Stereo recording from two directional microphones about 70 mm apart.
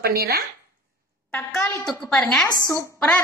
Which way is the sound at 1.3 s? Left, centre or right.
Left.